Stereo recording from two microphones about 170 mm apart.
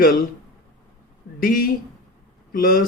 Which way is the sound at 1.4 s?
55° left (ahead or behind).